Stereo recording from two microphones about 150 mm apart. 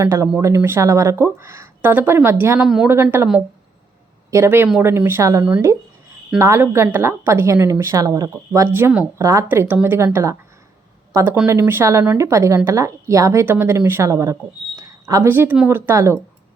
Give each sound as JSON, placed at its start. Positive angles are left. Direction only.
{"t": 0.0, "sound": "a woman's voice", "side_deg": -20}
{"t": 2.6, "sound": "a woman's voice", "side_deg": -5}
{"t": 2.9, "sound": "a woman's voice", "side_deg": -15}
{"t": 4.3, "sound": "a woman's voice", "side_deg": -15}